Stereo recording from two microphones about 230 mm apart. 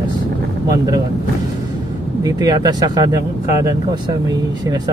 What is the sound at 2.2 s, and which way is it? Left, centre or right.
Speech, centre.